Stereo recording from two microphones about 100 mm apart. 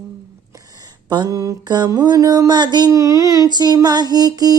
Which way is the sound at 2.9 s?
35° right (ahead or behind).